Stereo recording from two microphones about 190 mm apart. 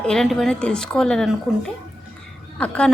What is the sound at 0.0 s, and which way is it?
Speech, 5° left (ahead or behind).